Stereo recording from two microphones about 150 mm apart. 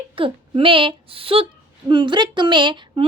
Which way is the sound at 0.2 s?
35° right (ahead or behind).